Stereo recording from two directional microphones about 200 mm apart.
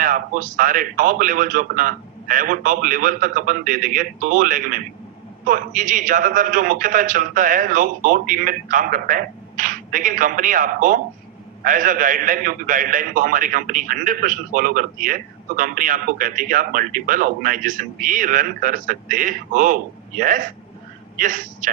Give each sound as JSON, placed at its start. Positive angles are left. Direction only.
{"t": 0.0, "sound": "a man's voice", "side_deg": -40}